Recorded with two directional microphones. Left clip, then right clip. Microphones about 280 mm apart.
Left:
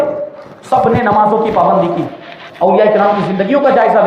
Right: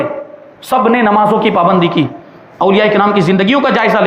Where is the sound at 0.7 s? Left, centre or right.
Right.